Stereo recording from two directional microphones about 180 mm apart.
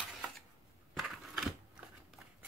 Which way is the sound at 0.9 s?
Centre (ahead or behind).